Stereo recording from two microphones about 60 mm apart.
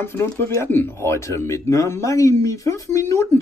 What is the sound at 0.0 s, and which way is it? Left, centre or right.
Speech, left.